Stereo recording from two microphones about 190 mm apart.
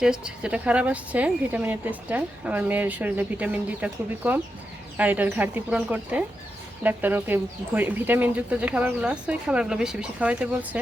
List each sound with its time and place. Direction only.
0.0 s speech: 5° right (ahead or behind)